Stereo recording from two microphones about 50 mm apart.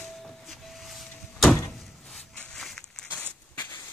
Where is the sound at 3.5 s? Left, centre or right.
Left.